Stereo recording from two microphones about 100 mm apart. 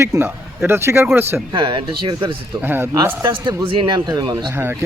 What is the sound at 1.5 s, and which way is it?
Speech, 50° right (ahead or behind).